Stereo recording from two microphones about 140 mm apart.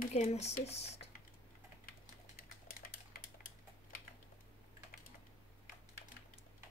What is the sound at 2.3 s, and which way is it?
Typing, 90° left.